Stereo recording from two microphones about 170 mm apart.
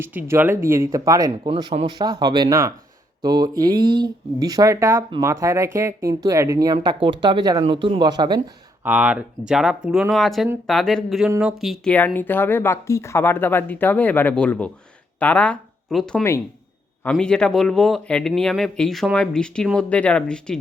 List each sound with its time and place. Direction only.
0.0 s speech: 10° right (ahead or behind)
1.5 s speech: 35° right (ahead or behind)
8.8 s speech: 10° right (ahead or behind)
11.9 s speech: 10° left (ahead or behind)